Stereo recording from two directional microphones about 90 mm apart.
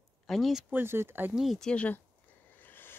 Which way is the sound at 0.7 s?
25° right (ahead or behind).